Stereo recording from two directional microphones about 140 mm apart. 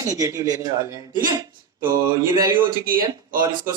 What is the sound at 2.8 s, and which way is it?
Speech, 90° right.